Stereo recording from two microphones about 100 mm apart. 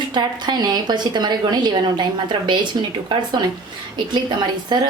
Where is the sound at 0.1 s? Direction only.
45° right (ahead or behind).